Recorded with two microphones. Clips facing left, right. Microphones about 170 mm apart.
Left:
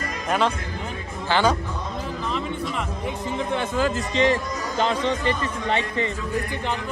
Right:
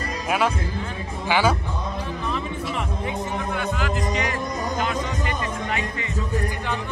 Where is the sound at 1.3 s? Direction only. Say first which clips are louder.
Even; 10° right (ahead or behind).